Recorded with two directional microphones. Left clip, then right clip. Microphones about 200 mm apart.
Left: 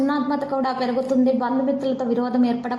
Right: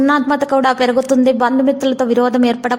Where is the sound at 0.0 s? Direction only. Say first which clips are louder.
Right 9 dB; 25° right (ahead or behind).